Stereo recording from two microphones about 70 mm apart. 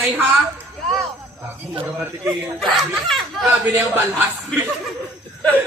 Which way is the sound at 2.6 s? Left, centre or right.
Centre.